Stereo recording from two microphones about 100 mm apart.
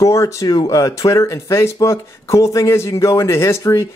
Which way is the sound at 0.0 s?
30° left (ahead or behind).